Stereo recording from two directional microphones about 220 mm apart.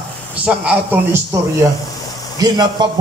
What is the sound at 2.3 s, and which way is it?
Speech, 20° right (ahead or behind).